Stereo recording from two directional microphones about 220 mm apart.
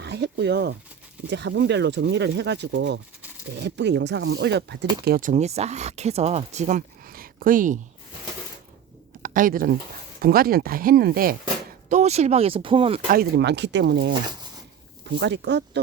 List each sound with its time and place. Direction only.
0.0 s speech: 50° right (ahead or behind)
5.0 s speech: 40° right (ahead or behind)
9.2 s speech: 40° right (ahead or behind)
11.9 s speech: 30° right (ahead or behind)
13.1 s speech: 45° right (ahead or behind)